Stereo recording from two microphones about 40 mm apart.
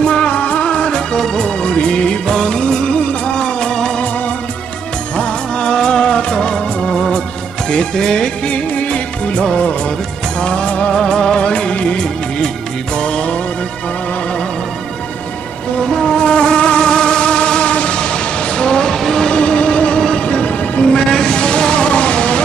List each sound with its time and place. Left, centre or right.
0.0 s music: left
1.6 s music of bollywood: left
5.1 s music of bollywood: left
7.1 s music: left
8.5 s music: left
11.0 s music of bollywood: centre
12.9 s music: left
15.9 s music: centre
19.2 s music: left